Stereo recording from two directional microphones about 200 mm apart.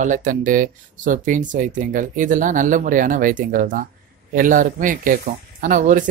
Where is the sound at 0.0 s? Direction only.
40° right (ahead or behind).